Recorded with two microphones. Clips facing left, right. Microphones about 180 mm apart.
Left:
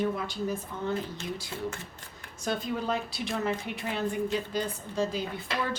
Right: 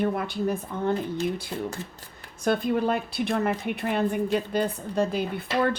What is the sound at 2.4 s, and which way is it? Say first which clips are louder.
A woman's voice: right 8 dB; 60° right (ahead or behind).